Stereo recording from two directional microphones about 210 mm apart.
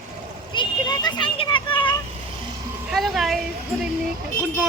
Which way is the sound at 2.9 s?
Centre (ahead or behind).